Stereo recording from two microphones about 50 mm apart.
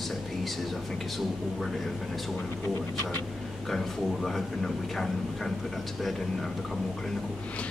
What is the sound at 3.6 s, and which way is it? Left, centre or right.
Speech, centre.